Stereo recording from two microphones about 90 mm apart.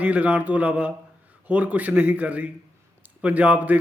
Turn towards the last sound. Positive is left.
turn(degrees=-15)  # may be behind; listen again after turning